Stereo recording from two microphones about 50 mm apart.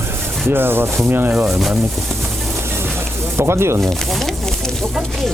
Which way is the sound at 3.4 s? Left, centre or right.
Right.